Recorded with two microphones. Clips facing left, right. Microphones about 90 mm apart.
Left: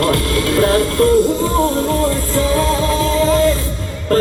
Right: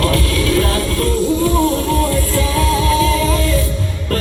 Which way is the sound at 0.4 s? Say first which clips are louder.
Left 6 dB; 45° left (ahead or behind).